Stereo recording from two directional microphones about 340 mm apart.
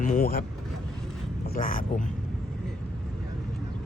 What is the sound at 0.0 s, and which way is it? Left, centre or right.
Speech, left.